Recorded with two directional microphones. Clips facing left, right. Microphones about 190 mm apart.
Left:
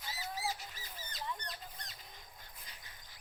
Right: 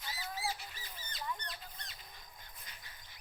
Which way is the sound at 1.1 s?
40° left (ahead or behind).